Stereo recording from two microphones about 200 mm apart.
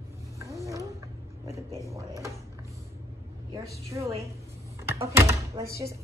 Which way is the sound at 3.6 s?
15° right (ahead or behind).